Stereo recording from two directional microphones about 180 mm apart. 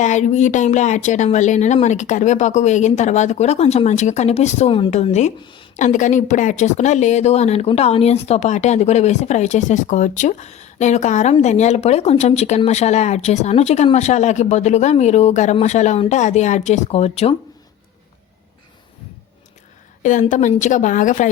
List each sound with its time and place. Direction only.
0.0 s a woman's voice: 40° left (ahead or behind)
20.0 s a woman's voice: 45° left (ahead or behind)